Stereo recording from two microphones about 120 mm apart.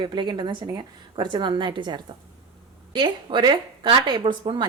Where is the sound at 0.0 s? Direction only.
40° right (ahead or behind).